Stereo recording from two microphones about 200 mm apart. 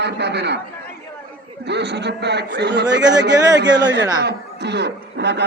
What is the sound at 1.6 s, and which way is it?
A man's voice, 55° right (ahead or behind).